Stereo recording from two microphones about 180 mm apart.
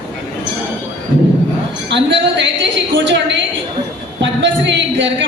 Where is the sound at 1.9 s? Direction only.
80° right.